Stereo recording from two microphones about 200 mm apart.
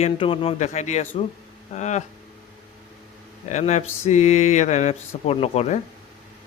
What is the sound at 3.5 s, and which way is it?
Speech, 35° left (ahead or behind).